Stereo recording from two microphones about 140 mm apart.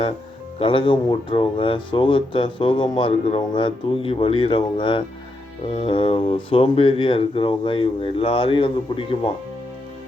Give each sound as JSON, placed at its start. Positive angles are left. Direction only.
{"t": 0.6, "sound": "speech", "side_deg": 35}